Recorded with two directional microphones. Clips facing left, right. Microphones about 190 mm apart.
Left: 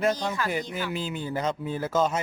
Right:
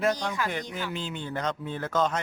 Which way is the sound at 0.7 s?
10° left (ahead or behind).